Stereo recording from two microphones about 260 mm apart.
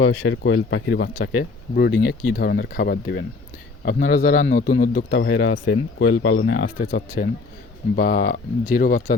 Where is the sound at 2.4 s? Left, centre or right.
Left.